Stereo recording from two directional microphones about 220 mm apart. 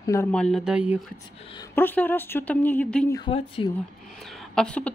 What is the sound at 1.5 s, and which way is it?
Speech, 15° left (ahead or behind).